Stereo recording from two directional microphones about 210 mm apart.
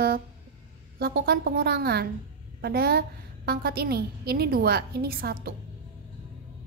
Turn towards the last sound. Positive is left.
turn(degrees=-45)  # may be behind; listen again after turning